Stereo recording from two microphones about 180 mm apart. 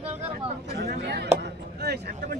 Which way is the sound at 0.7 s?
65° right (ahead or behind).